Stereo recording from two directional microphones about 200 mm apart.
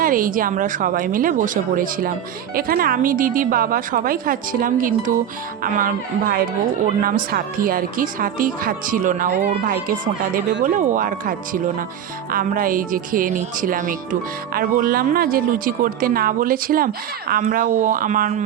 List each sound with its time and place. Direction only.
0.0 s speech: 45° right (ahead or behind)